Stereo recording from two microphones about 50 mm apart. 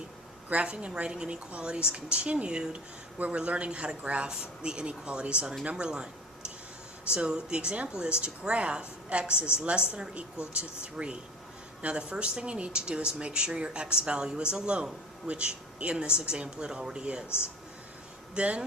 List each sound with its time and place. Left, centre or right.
0.5 s a woman's voice: right
7.1 s a woman's voice: centre
17.2 s speech: left
18.3 s a woman's voice: right